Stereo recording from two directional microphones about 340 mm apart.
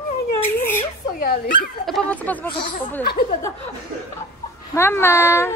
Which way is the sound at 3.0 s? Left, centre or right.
Left.